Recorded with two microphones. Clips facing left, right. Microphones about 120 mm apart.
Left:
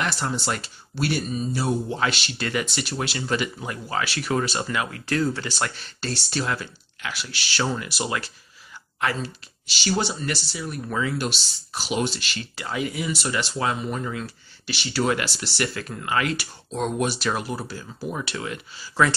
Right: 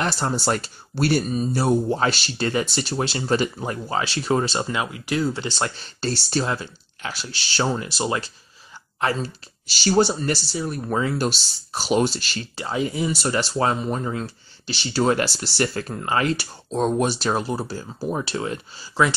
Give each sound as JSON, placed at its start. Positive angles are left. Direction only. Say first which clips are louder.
{"t": 0.0, "sound": "speech", "louder": "right 3 dB", "side_deg": -35}